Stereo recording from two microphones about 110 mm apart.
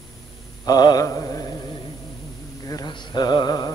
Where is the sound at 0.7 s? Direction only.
35° left (ahead or behind).